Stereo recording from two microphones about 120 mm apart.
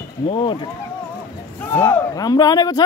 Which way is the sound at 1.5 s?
15° left (ahead or behind).